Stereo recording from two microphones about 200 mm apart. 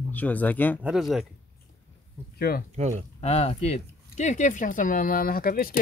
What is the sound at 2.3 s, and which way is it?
Speech, 50° left (ahead or behind).